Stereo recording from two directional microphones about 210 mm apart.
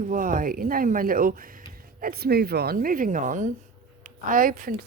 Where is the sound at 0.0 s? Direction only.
40° right (ahead or behind).